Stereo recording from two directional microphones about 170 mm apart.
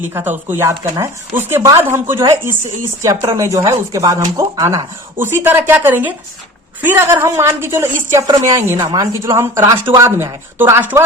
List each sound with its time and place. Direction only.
0.1 s speech: 15° right (ahead or behind)